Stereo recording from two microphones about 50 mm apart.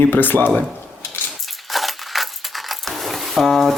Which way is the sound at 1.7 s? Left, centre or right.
Centre.